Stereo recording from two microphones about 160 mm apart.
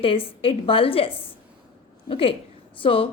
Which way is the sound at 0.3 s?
35° left (ahead or behind).